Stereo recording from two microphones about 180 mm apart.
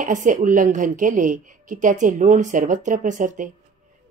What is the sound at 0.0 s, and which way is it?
A woman's voice, 45° right (ahead or behind).